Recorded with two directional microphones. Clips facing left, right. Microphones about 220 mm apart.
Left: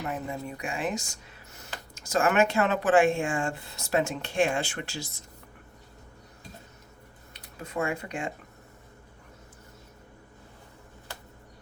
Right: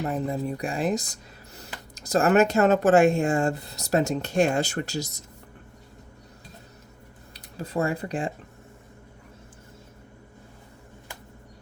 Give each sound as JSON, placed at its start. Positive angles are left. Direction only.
{"t": 0.0, "sound": "speech", "side_deg": -35}
{"t": 7.3, "sound": "speech", "side_deg": -35}